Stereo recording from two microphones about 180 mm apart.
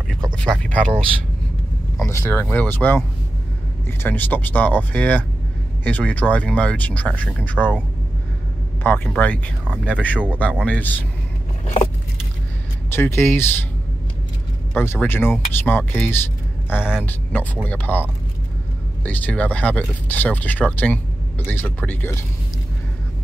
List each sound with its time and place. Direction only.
0.4 s speech: 5° left (ahead or behind)
2.0 s speech: 10° left (ahead or behind)
4.0 s speech: 10° left (ahead or behind)
8.8 s speech: 10° left (ahead or behind)
11.6 s vehicle: 40° left (ahead or behind)
12.9 s speech: 15° left (ahead or behind)
14.7 s speech: 10° left (ahead or behind)
19.0 s speech: 10° left (ahead or behind)